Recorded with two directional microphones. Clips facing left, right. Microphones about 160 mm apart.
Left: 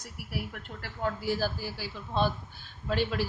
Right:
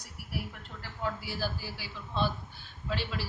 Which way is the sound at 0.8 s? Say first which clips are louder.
Left 3 dB; 50° left (ahead or behind).